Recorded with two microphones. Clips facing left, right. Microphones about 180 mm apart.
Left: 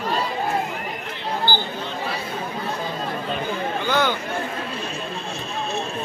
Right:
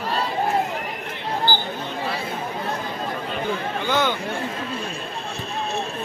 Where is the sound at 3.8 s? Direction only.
20° right (ahead or behind).